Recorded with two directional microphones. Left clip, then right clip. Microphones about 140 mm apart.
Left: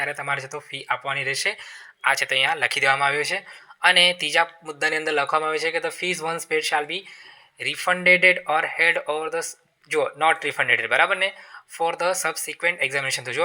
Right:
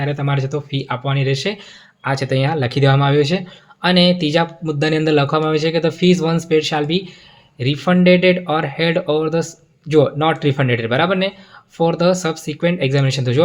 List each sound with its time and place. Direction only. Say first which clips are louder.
0.0 s speech: right 3 dB; 40° left (ahead or behind)
1.3 s speech: right 4 dB; 40° left (ahead or behind)
2.0 s speech: even; 55° left (ahead or behind); by 13.4 s 35° left (ahead or behind)